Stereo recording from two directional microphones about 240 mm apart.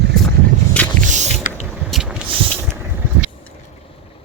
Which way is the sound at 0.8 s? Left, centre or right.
Centre.